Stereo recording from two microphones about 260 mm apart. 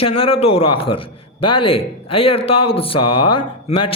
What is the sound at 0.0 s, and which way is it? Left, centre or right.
A man's voice, left.